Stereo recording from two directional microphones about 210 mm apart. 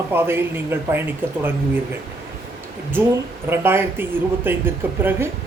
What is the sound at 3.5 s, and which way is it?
Speech, 10° right (ahead or behind).